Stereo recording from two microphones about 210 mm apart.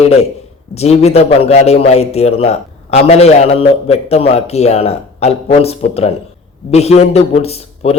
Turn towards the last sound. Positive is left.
turn(degrees=30)  # may be behind; listen again after turning